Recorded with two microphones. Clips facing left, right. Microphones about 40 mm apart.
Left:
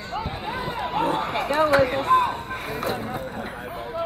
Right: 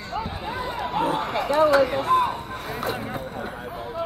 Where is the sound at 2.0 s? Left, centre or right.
Centre.